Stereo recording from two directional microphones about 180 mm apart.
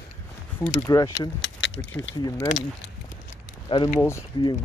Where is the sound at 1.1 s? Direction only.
90° left.